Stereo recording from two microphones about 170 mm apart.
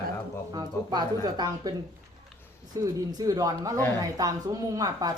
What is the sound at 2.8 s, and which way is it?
Speech, 20° right (ahead or behind).